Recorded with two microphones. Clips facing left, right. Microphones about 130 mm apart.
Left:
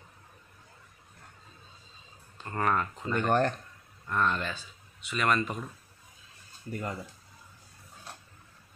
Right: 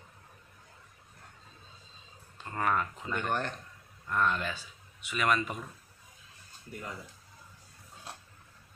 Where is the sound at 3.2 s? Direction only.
45° left (ahead or behind).